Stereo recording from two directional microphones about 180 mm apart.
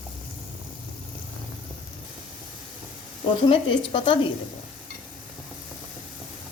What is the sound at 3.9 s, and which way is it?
Speech, 30° left (ahead or behind).